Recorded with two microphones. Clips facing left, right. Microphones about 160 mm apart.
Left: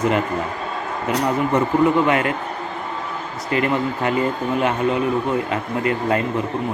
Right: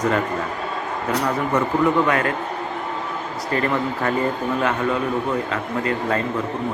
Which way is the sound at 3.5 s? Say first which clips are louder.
Left 2 dB; 15° left (ahead or behind).